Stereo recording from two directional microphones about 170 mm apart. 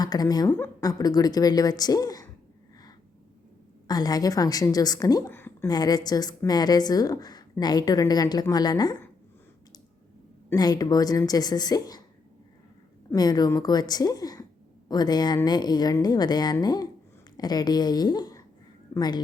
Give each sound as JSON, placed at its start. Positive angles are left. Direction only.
{"t": 0.0, "sound": "a woman's voice", "side_deg": 25}
{"t": 3.8, "sound": "a woman's voice", "side_deg": 25}
{"t": 5.7, "sound": "a woman's voice", "side_deg": 25}
{"t": 10.5, "sound": "a woman's voice", "side_deg": 25}
{"t": 13.1, "sound": "a woman's voice", "side_deg": 25}